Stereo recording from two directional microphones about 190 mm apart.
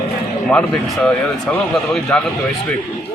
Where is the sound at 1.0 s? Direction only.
5° left (ahead or behind).